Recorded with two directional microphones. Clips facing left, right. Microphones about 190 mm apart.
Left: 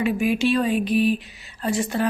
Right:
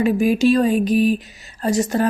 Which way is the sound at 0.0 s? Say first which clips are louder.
Right 5 dB; 40° right (ahead or behind).